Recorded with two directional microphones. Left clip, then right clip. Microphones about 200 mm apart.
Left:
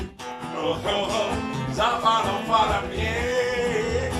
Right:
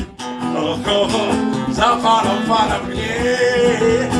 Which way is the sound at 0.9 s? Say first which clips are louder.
Right 10 dB; 50° right (ahead or behind).